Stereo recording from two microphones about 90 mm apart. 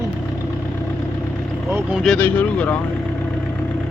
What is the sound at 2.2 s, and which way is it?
Speech, 15° left (ahead or behind).